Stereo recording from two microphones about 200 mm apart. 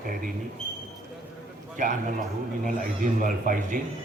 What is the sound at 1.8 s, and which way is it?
A man's voice, 40° right (ahead or behind).